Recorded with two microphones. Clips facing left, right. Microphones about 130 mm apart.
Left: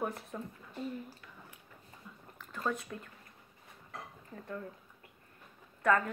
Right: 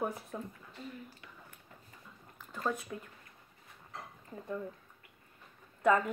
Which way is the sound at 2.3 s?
10° right (ahead or behind).